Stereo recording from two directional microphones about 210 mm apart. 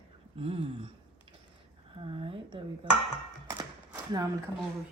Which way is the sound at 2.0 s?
25° right (ahead or behind).